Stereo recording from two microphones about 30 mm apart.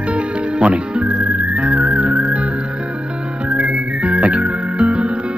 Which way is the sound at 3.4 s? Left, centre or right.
Right.